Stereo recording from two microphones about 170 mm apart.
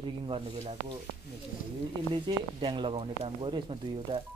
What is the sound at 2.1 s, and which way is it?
Speech, 30° right (ahead or behind).